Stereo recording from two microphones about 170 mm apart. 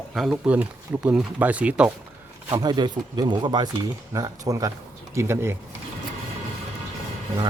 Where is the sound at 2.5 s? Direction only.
25° right (ahead or behind).